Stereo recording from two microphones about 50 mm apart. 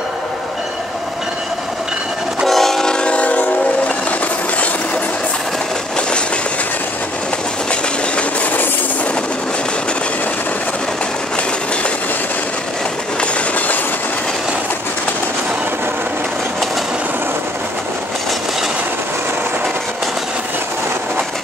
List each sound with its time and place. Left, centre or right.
2.4 s train: centre; by 3.4 s left
13.2 s train: left